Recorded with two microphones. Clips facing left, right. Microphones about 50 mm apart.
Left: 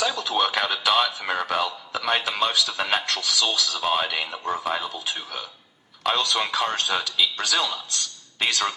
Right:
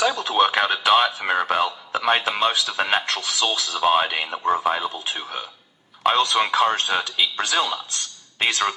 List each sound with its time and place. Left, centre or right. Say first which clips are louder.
0.0 s speech: right 4 dB; right